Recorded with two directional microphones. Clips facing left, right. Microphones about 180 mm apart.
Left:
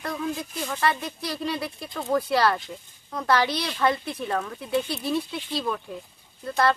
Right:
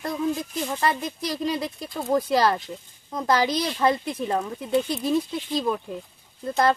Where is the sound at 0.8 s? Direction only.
40° right (ahead or behind).